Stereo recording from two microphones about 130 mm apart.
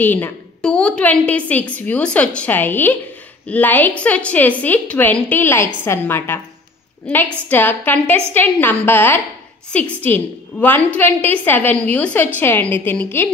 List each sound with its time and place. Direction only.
0.0 s a woman's voice: 15° left (ahead or behind)
7.4 s a woman's voice: 15° left (ahead or behind)